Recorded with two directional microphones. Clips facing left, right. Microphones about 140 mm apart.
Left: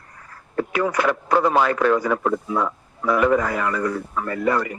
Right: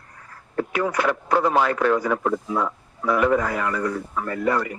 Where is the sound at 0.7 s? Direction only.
90° left.